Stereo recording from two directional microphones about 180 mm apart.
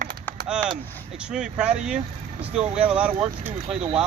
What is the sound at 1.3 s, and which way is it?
Speech, 5° right (ahead or behind).